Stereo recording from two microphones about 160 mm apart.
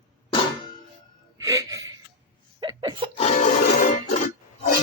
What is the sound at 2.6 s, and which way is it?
Laughter, 25° right (ahead or behind).